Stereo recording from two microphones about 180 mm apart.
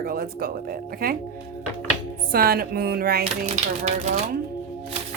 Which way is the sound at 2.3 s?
55° right (ahead or behind).